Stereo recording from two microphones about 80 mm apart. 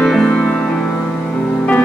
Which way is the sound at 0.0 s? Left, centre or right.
Centre.